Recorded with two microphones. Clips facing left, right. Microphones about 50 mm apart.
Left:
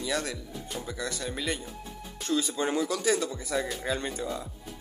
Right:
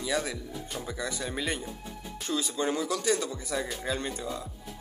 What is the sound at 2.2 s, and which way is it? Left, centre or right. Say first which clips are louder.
Music: left 2 dB; centre.